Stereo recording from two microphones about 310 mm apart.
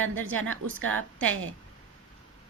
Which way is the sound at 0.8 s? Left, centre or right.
Right.